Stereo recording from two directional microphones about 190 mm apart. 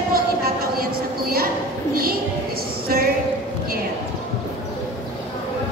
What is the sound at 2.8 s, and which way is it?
Speech, 50° right (ahead or behind).